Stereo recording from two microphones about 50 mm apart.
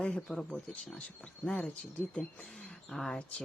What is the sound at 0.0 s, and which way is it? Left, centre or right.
Speech, centre.